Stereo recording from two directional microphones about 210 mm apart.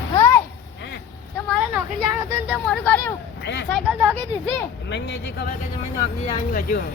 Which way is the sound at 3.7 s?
Centre (ahead or behind).